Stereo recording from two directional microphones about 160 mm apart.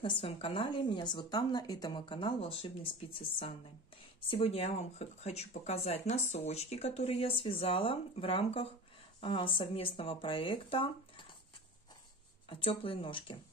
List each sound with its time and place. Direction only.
0.0 s a woman's voice: 35° left (ahead or behind)
12.4 s a woman's voice: 35° left (ahead or behind)